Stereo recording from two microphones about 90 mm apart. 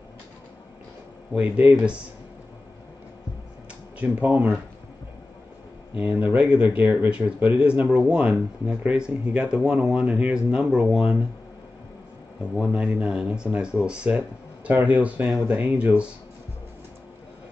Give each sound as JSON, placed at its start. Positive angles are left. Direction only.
{"t": 1.3, "sound": "speech", "side_deg": -15}
{"t": 4.3, "sound": "speech", "side_deg": -25}
{"t": 5.9, "sound": "speech", "side_deg": -20}
{"t": 12.5, "sound": "speech", "side_deg": -10}